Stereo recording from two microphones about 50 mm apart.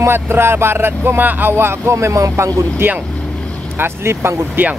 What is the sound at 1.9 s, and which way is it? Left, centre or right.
Speech, right.